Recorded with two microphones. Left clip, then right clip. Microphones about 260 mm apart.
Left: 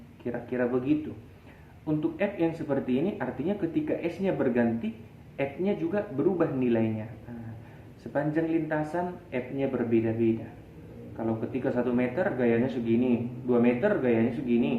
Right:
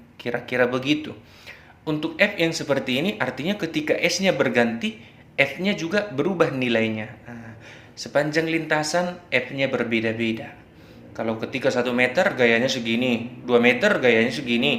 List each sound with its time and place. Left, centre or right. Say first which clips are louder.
0.3 s speech: right 8 dB; right
5.9 s speech: right 4 dB; right
8.1 s speech: right 6 dB; right